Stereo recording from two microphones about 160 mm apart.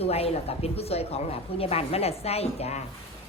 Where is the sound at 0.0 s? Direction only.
40° left (ahead or behind).